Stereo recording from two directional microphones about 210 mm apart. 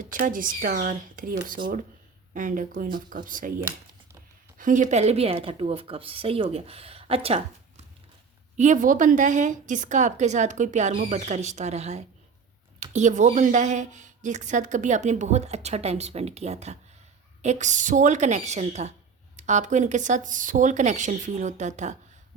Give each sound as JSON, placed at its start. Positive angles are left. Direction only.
{"t": 0.0, "sound": "a woman's voice", "side_deg": -40}
{"t": 8.5, "sound": "speech", "side_deg": -35}